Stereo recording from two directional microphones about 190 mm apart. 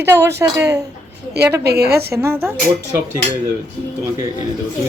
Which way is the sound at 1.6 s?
55° right (ahead or behind).